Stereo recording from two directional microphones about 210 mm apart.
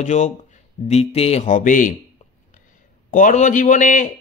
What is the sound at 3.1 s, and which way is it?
A man's voice, 40° left (ahead or behind).